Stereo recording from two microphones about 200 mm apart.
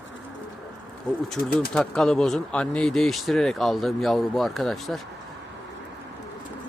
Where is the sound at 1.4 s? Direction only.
45° left (ahead or behind).